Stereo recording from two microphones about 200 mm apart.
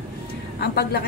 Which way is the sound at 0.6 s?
50° left (ahead or behind).